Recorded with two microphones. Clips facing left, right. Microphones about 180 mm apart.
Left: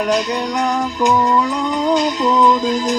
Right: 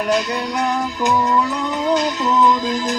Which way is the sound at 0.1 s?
15° left (ahead or behind).